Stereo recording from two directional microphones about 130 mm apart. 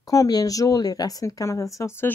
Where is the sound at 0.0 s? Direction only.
25° left (ahead or behind).